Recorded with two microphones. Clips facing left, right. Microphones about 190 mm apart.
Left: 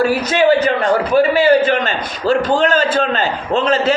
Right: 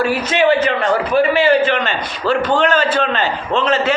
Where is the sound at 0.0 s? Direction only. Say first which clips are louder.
Left 2 dB; 40° left (ahead or behind).